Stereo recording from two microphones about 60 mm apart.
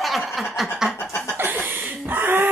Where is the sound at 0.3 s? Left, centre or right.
Centre.